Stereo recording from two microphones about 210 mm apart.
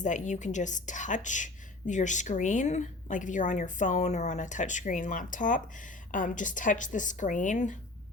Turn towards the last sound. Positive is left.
turn(degrees=35)  # may be behind; listen again after turning